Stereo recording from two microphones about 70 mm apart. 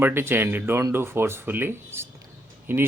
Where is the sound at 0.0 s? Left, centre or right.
Right.